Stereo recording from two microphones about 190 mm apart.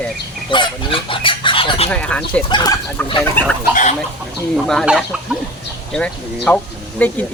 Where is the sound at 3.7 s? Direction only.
40° left (ahead or behind).